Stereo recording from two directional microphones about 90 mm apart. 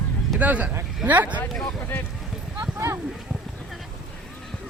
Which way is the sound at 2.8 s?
35° right (ahead or behind).